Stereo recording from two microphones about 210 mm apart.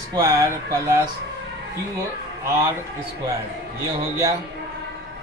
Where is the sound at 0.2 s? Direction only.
15° right (ahead or behind).